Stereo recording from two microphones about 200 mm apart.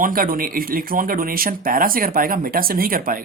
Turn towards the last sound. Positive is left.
turn(degrees=-45)  # may be behind; listen again after turning